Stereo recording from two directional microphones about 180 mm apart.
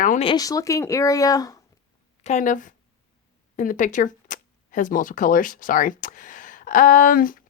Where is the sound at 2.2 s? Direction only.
45° left (ahead or behind).